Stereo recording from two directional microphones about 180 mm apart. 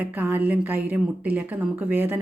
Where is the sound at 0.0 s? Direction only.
10° right (ahead or behind).